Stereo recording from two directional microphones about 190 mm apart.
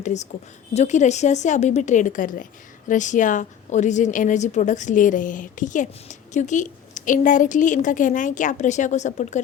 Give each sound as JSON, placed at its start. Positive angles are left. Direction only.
{"t": 0.0, "sound": "a woman's voice", "side_deg": 40}